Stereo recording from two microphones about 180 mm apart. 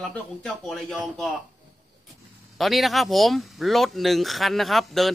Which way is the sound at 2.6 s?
Centre (ahead or behind).